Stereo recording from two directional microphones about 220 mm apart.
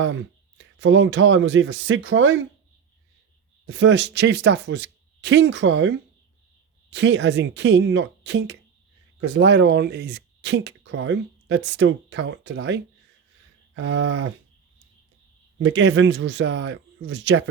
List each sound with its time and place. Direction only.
0.0 s speech: 60° right (ahead or behind)
3.7 s speech: 55° right (ahead or behind)
13.7 s speech: 65° right (ahead or behind)
15.5 s speech: 60° right (ahead or behind)